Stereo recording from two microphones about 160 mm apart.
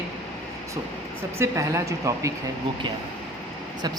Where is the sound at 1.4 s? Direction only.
20° right (ahead or behind).